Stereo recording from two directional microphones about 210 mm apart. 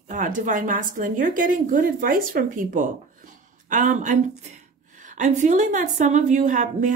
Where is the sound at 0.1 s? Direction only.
40° right (ahead or behind).